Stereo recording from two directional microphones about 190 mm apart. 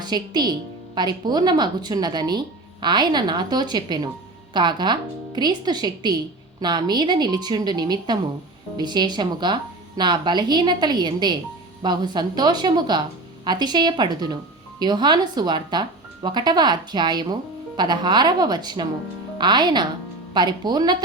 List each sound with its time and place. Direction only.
0.0 s speech: 20° right (ahead or behind)